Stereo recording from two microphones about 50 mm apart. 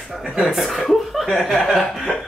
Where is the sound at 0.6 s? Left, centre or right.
Centre.